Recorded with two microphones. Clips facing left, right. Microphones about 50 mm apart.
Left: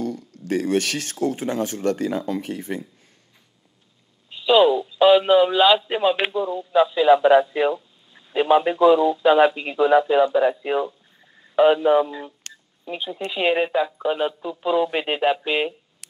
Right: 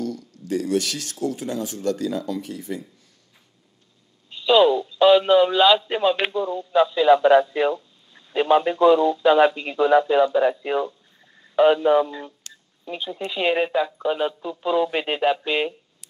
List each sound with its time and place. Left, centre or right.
0.5 s speech: left
4.3 s speech: centre
16.0 s a sound: left